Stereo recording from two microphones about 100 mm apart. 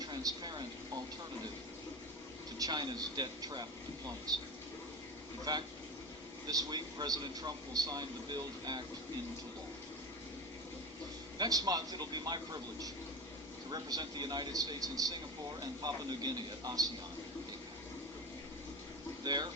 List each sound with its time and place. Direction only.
0.0 s a sound: 40° right (ahead or behind)
2.6 s a man's voice: 45° right (ahead or behind)
5.5 s a man's voice: 40° right (ahead or behind)
11.3 s a man's voice: 40° right (ahead or behind)
19.2 s speech: 45° right (ahead or behind)